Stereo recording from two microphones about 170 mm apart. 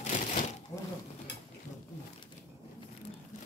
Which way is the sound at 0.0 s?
45° left (ahead or behind).